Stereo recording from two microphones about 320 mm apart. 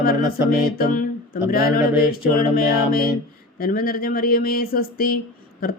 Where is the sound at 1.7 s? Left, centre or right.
Left.